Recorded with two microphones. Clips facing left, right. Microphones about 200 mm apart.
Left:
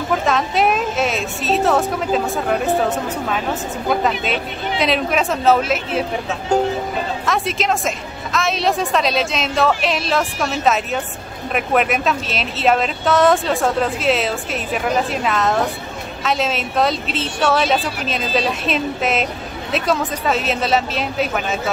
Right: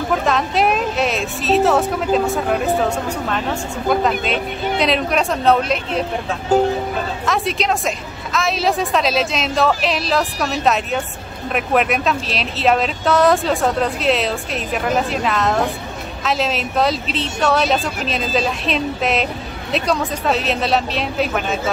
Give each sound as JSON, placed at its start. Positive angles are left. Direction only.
{"t": 0.1, "sound": "speech", "side_deg": 0}
{"t": 4.2, "sound": "speech", "side_deg": 0}